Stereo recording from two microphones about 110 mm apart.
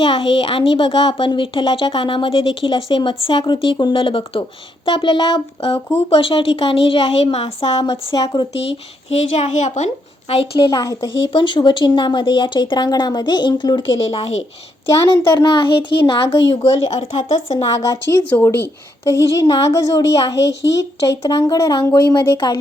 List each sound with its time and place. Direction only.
0.0 s a woman's voice: 50° left (ahead or behind); by 7.7 s 65° left (ahead or behind)
7.8 s speech: 40° left (ahead or behind)
9.1 s a woman's voice: 80° left; by 10.8 s 50° left (ahead or behind)
10.8 s speech: 30° left (ahead or behind)
11.2 s speech: 45° left (ahead or behind); by 17.7 s 90° left
17.7 s speech: 30° left (ahead or behind)
18.3 s a woman's voice: 20° left (ahead or behind)